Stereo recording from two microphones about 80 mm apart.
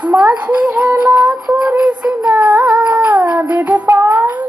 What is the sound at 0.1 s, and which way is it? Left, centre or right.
Child singing, centre.